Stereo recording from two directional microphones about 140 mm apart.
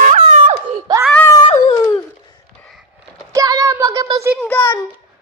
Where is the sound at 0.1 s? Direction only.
60° right (ahead or behind).